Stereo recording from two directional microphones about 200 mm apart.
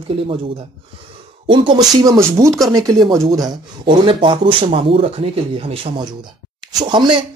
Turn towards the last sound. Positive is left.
turn(degrees=-20)  # may be behind; listen again after turning